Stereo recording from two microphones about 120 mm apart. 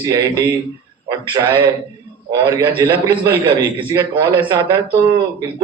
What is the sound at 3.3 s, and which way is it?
Speech, 45° right (ahead or behind).